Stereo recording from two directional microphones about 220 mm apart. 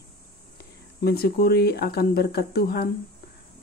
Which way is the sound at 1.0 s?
45° left (ahead or behind).